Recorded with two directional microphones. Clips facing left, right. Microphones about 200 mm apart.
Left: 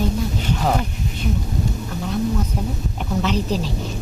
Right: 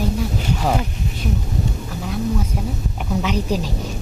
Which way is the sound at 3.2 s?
10° right (ahead or behind).